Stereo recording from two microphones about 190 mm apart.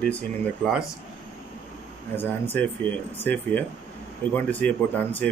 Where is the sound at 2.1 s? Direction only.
10° left (ahead or behind).